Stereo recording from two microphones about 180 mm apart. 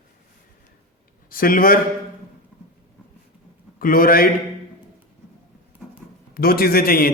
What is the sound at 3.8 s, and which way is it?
Speech, 55° left (ahead or behind).